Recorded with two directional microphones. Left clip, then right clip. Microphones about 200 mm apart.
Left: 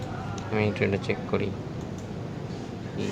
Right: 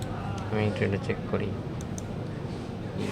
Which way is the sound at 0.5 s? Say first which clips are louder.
Left 3 dB; 20° left (ahead or behind).